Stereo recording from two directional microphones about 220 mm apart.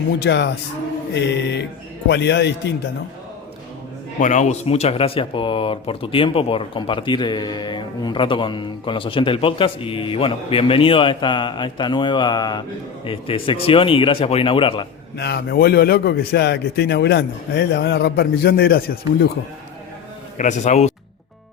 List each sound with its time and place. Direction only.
0.2 s a man's voice: 50° left (ahead or behind)
4.2 s speech: 35° left (ahead or behind)
15.2 s a man's voice: 45° left (ahead or behind)
20.4 s a man's voice: 35° left (ahead or behind)